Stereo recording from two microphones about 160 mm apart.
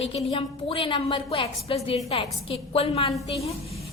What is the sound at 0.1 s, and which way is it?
A woman's voice, 35° left (ahead or behind).